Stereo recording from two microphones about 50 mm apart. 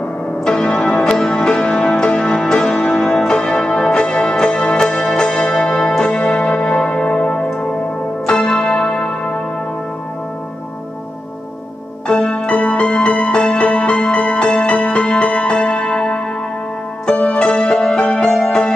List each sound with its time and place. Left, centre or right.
0.5 s music: centre
8.3 s a sound: centre
12.1 s music: centre
12.4 s music: left